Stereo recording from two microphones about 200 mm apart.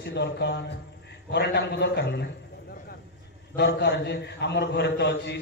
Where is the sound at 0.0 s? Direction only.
60° left (ahead or behind).